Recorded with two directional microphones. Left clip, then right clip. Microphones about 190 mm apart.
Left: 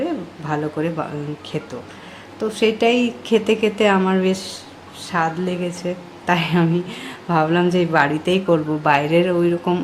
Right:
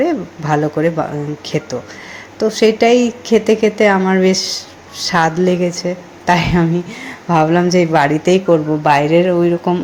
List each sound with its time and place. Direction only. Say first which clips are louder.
0.0 s a woman's voice: right 8 dB; 20° right (ahead or behind)